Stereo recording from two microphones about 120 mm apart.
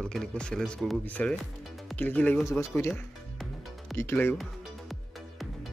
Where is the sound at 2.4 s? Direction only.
25° left (ahead or behind).